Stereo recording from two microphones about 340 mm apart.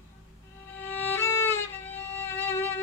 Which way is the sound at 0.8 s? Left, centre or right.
Centre.